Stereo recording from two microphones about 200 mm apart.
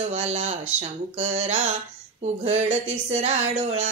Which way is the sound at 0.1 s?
30° right (ahead or behind).